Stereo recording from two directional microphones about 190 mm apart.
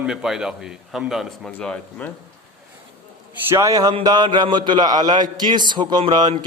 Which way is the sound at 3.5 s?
15° right (ahead or behind).